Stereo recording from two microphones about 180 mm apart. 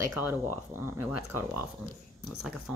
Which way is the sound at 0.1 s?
10° right (ahead or behind).